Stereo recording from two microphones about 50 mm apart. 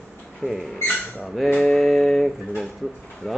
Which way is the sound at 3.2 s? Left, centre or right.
Centre.